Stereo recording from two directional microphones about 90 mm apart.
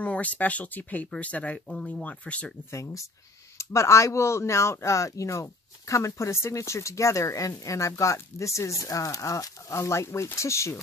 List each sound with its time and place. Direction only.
0.0 s speech: 15° left (ahead or behind)
2.7 s speech: 35° left (ahead or behind)